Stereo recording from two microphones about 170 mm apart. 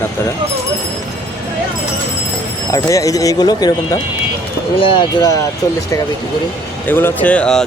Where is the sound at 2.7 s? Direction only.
20° left (ahead or behind).